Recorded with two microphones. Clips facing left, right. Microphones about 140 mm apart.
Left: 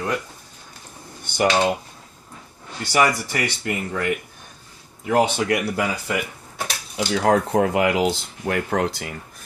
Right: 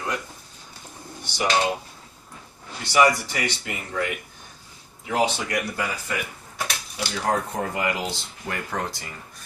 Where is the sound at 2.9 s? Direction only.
50° left (ahead or behind).